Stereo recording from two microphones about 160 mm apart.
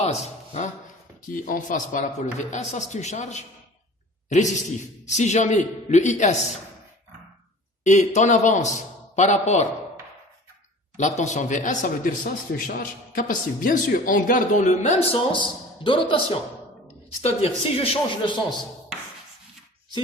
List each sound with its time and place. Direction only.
0.0 s speech: 45° left (ahead or behind)
1.3 s a man's voice: 55° left (ahead or behind)
5.0 s a man's voice: 45° left (ahead or behind)
7.9 s a man's voice: 50° left (ahead or behind)
11.2 s a man's voice: 50° left (ahead or behind); by 18.3 s 30° left (ahead or behind)